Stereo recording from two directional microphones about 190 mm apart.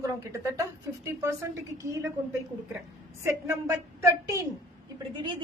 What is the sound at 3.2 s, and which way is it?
A woman's voice, 10° right (ahead or behind).